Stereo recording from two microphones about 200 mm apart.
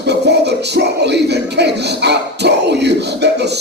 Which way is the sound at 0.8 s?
55° right (ahead or behind).